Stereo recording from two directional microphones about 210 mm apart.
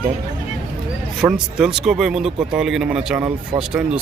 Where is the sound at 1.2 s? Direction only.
5° right (ahead or behind).